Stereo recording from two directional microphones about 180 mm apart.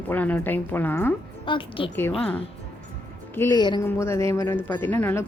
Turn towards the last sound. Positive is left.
turn(degrees=10)  # may be behind; listen again after turning